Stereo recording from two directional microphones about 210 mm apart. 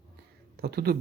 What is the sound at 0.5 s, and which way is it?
Speech, 50° right (ahead or behind).